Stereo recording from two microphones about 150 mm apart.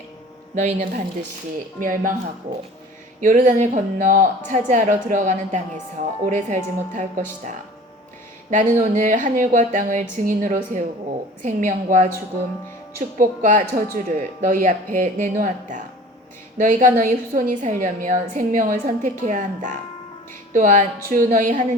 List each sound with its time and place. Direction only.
0.5 s a woman's voice: 55° right (ahead or behind)
3.2 s a woman's voice: 60° right (ahead or behind)